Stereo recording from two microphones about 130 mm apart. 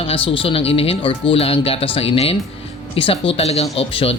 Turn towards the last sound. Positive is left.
turn(degrees=45)  # may be behind; listen again after turning